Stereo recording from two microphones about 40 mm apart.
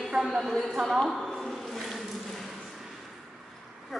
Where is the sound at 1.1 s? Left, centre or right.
Centre.